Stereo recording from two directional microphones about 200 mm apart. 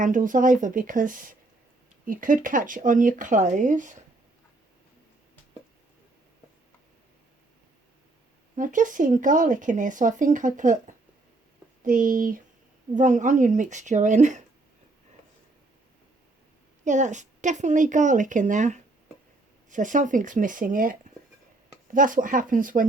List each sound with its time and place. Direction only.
0.0 s speech: 40° right (ahead or behind)
8.5 s speech: 40° right (ahead or behind)
16.8 s speech: 35° right (ahead or behind)